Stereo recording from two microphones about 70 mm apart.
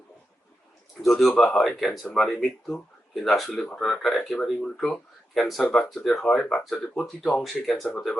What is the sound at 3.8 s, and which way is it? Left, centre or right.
Speech, centre.